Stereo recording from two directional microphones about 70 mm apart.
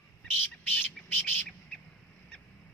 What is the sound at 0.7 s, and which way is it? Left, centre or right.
Bird, left.